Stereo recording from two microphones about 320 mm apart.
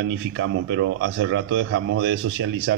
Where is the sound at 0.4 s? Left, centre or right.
Right.